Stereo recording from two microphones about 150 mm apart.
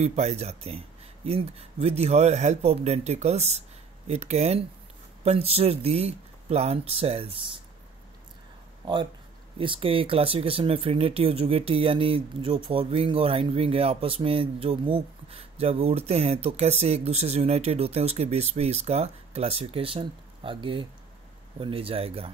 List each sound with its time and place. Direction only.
0.0 s speech: 45° right (ahead or behind)
9.6 s speech: 35° right (ahead or behind)